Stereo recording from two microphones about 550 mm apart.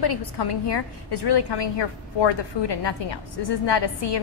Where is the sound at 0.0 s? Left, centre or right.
Left.